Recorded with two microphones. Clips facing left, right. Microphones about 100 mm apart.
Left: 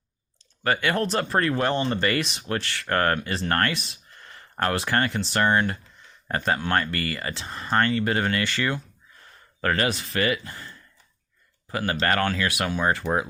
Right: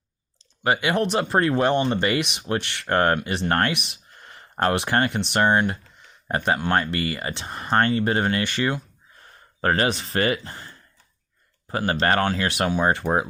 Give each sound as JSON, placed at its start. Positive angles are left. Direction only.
{"t": 0.6, "sound": "speech", "side_deg": -15}
{"t": 3.8, "sound": "a sound", "side_deg": -20}
{"t": 5.3, "sound": "speech", "side_deg": -20}
{"t": 9.6, "sound": "speech", "side_deg": -30}
{"t": 11.8, "sound": "speech", "side_deg": -30}